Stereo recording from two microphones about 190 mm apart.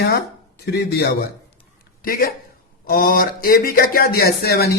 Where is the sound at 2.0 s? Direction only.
50° left (ahead or behind).